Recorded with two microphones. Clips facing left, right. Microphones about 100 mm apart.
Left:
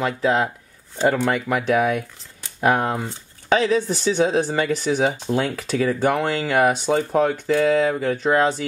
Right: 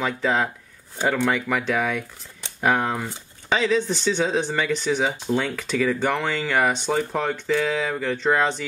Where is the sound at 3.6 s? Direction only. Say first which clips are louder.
Left 2 dB; 45° left (ahead or behind).